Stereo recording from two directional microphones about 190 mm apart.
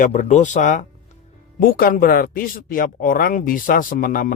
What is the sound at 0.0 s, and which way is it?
Speech, 40° left (ahead or behind).